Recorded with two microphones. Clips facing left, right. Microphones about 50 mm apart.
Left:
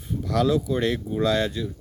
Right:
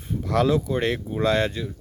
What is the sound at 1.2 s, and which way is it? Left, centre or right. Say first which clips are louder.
Speech: right 1 dB; right.